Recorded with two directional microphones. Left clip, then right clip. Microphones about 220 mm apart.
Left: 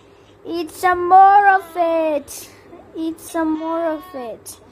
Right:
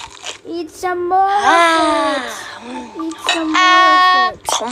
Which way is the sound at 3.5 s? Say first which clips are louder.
Right 13 dB; 50° right (ahead or behind).